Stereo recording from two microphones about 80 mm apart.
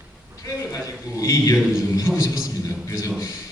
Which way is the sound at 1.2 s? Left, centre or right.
Left.